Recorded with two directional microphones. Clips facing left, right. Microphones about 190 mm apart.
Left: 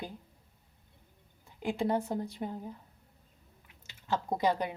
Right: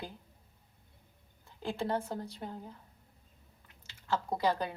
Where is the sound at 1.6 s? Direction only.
15° left (ahead or behind).